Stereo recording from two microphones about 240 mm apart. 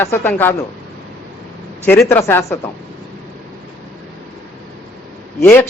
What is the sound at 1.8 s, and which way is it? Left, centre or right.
Speech, centre.